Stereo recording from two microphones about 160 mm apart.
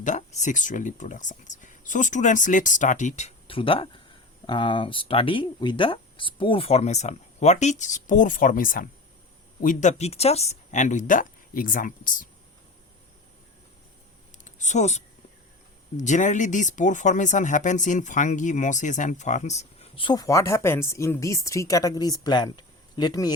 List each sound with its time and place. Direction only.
0.0 s speech: 50° left (ahead or behind)
14.4 s speech: 45° left (ahead or behind)
20.1 s a woman's voice: 20° left (ahead or behind)